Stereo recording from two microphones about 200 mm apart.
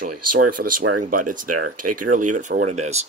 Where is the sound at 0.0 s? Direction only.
45° right (ahead or behind).